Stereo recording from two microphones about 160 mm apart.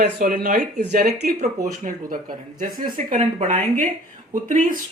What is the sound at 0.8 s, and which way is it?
Speech, 85° right.